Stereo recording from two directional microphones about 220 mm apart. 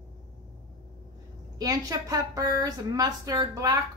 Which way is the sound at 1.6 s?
15° right (ahead or behind).